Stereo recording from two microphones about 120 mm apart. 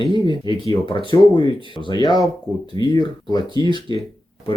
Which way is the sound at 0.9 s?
40° left (ahead or behind).